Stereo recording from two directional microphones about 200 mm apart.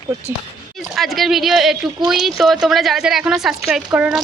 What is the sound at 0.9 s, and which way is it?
A woman's voice, centre (ahead or behind).